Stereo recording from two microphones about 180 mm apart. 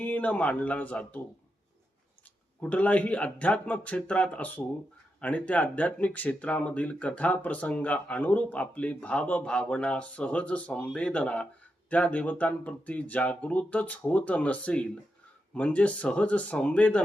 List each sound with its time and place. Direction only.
0.0 s speech: 10° left (ahead or behind)
2.6 s speech: 10° left (ahead or behind)